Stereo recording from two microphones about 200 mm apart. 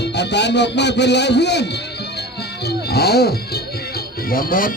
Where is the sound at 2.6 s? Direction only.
55° left (ahead or behind).